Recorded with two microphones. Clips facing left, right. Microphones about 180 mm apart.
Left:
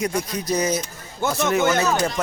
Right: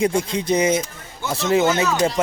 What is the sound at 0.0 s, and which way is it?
Speech, 25° right (ahead or behind).